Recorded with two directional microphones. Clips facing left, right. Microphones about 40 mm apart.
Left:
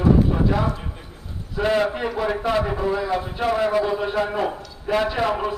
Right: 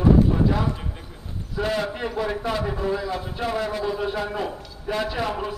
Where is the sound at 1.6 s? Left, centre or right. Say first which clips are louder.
Left 5 dB; left.